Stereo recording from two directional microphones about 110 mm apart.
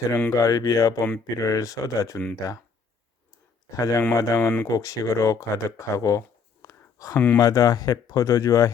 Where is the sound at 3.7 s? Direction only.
30° left (ahead or behind).